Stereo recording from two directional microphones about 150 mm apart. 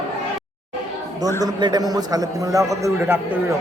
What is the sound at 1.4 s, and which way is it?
A man's voice, 25° right (ahead or behind).